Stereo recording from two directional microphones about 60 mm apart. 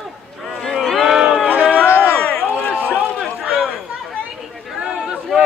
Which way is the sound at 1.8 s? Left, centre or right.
Left.